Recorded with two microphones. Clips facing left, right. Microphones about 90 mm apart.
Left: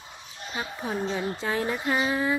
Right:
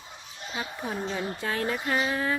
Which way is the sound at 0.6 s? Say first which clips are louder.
Left 3 dB; 15° left (ahead or behind).